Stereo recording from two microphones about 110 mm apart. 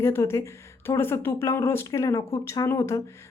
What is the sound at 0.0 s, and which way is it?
Speech, 25° left (ahead or behind).